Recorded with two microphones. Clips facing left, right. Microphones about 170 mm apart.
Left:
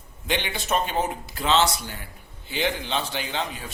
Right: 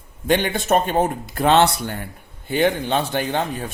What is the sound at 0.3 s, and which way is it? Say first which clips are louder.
Speech: right 8 dB; 50° right (ahead or behind).